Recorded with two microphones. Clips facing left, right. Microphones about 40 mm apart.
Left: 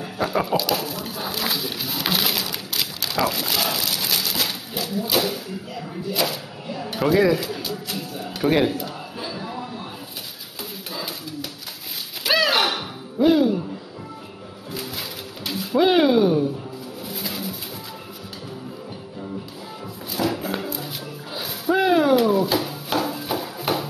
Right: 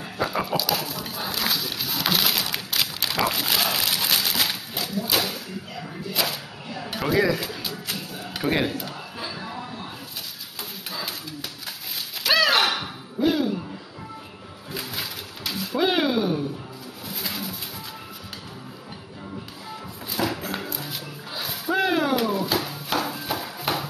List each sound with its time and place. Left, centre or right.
0.0 s a sound: centre
2.5 s speech: centre
7.3 s speech: centre
10.9 s pigeon: centre
12.2 s music: centre
15.4 s a sound: centre
17.1 s pigeon: centre
20.2 s music: centre
20.5 s music: centre
21.3 s a sound: centre